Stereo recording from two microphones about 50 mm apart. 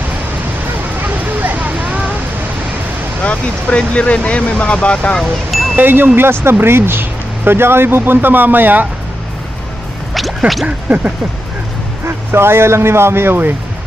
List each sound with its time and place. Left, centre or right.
1.1 s vehicle: right
1.8 s a sound: right
3.3 s speech: left
5.2 s speech: centre
5.8 s speech: right
10.9 s a sound: right
12.3 s speech: right